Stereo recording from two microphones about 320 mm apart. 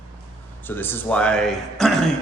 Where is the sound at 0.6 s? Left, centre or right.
Centre.